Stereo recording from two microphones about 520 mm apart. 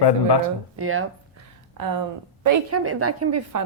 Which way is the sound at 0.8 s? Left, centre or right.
Right.